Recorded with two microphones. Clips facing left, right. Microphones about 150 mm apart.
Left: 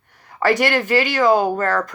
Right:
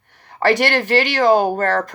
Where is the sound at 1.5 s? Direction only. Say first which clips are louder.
Right 1 dB; 65° right (ahead or behind).